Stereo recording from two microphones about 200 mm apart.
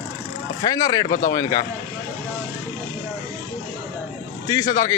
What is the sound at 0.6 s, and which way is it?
A man's voice, 20° left (ahead or behind).